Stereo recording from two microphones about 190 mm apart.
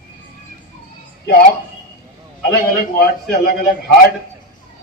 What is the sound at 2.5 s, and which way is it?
A man's voice, 55° left (ahead or behind).